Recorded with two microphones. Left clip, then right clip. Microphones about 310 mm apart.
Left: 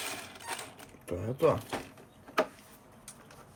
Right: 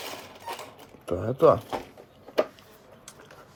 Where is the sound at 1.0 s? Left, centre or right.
Centre.